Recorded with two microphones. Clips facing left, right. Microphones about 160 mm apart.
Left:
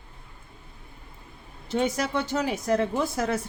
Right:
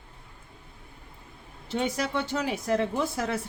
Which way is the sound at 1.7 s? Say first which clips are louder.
Left 3 dB; 45° left (ahead or behind).